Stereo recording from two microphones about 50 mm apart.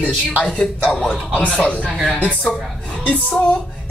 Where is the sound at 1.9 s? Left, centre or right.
Centre.